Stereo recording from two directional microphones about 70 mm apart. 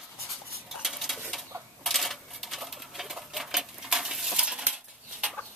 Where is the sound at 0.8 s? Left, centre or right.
Centre.